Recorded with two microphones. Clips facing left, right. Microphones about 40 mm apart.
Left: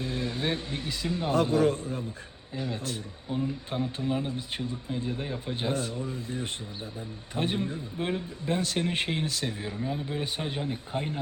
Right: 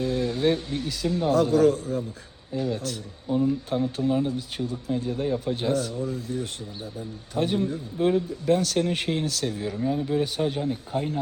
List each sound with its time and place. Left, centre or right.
0.0 s speech: left
3.2 s speech: centre
3.9 s speech: centre
4.3 s speech: left
9.7 s speech: centre; by 11.2 s left